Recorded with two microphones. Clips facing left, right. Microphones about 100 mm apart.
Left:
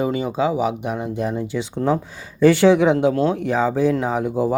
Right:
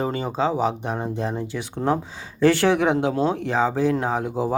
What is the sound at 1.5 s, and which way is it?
Speech, centre (ahead or behind).